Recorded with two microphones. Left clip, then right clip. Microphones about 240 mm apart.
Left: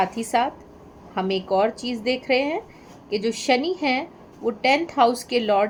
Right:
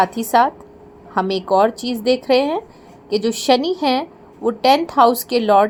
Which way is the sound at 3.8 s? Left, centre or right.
Centre.